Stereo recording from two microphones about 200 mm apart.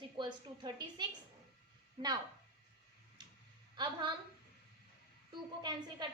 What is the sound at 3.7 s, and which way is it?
Speech, 20° right (ahead or behind).